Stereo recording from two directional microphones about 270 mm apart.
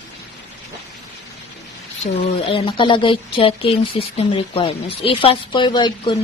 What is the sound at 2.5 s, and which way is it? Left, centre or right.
Speech, centre.